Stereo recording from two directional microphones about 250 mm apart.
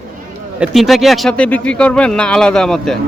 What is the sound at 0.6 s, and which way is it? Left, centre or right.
A man's voice, centre.